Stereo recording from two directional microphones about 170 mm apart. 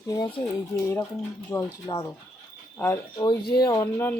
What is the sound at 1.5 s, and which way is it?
Speech, 10° left (ahead or behind).